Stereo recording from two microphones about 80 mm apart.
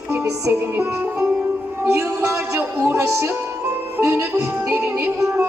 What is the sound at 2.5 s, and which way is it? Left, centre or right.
Music, right.